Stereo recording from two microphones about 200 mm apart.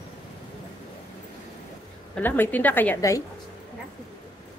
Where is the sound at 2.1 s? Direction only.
10° left (ahead or behind).